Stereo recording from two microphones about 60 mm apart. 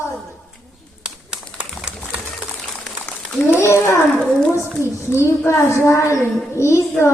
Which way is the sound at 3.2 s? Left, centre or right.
Centre.